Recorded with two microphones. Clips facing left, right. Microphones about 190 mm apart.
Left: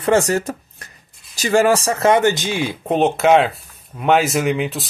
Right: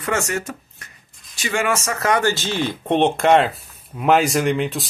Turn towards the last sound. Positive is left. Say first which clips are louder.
# even
turn(degrees=0)  # may be behind; listen again after turning